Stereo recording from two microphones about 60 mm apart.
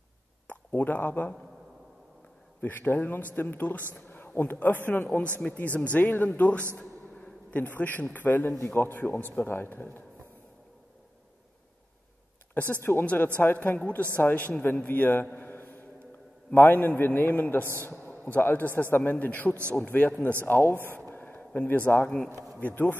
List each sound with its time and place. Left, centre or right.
0.7 s a man's voice: left
2.6 s a man's voice: left
12.9 s speech: left
13.4 s a man's voice: left
20.4 s a man's voice: left
20.9 s a sound: left
21.5 s a man's voice: left